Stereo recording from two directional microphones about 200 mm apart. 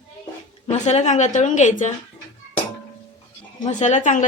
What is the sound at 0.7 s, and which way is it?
Speech, 35° left (ahead or behind).